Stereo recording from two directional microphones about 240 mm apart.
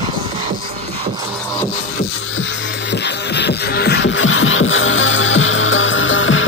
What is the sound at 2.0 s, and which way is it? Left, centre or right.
Music, left.